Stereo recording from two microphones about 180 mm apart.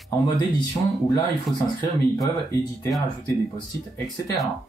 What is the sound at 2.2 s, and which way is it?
Speech, 20° left (ahead or behind).